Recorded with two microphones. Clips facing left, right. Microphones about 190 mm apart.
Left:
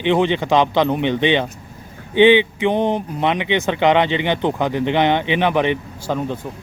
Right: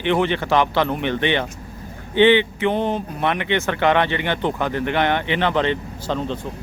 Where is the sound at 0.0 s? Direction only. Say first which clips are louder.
Left 3 dB; 15° left (ahead or behind).